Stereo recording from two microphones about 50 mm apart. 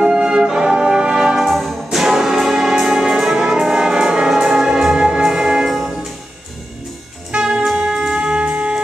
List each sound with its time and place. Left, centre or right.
0.0 s brass instrument: centre
1.4 s music: centre
7.3 s music: centre